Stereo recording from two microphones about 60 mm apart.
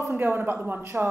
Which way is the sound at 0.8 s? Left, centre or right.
Right.